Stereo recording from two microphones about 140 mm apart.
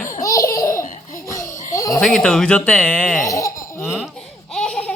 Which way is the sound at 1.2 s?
25° left (ahead or behind).